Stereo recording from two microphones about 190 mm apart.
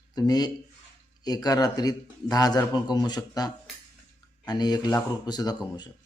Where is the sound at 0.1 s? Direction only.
20° left (ahead or behind).